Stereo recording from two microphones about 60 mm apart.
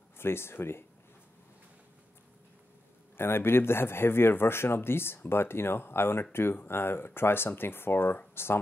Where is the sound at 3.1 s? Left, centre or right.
Left.